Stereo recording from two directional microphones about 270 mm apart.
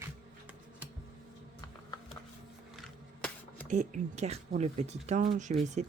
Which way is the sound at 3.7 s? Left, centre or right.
Right.